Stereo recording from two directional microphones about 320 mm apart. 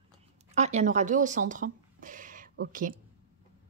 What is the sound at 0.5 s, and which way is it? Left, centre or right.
Speech, right.